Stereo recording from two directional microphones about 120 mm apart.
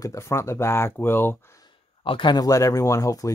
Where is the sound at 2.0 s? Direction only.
45° left (ahead or behind); by 3.3 s 30° left (ahead or behind).